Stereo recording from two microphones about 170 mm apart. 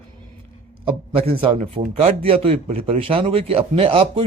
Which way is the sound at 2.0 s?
35° right (ahead or behind).